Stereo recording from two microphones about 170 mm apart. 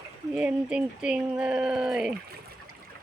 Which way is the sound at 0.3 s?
5° right (ahead or behind).